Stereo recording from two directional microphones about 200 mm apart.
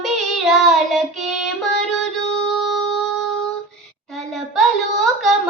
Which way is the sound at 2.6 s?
5° left (ahead or behind).